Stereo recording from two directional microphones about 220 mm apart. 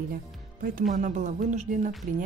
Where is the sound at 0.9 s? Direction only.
35° right (ahead or behind).